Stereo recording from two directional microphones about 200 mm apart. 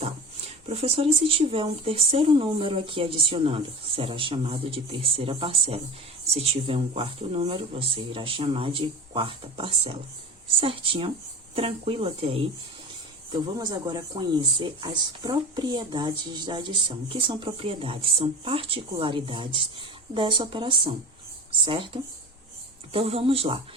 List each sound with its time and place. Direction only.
0.7 s speech: 30° right (ahead or behind)
22.9 s speech: 30° right (ahead or behind)